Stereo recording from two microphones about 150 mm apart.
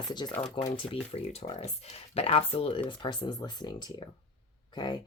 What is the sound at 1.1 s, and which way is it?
Speech, 45° left (ahead or behind).